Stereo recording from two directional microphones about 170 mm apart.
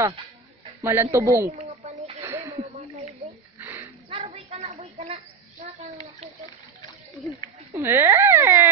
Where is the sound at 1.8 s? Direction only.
40° right (ahead or behind).